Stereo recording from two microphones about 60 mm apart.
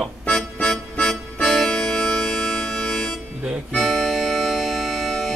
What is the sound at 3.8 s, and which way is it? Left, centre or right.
Accordion, centre.